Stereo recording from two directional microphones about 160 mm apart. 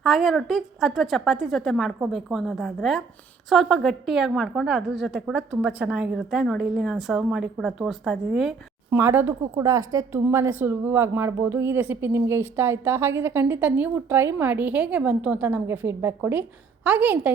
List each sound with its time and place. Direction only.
0.0 s a woman's voice: centre (ahead or behind)
8.9 s speech: 15° right (ahead or behind)